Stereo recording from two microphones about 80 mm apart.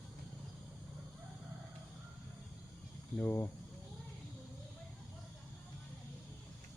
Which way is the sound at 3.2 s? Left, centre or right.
Left.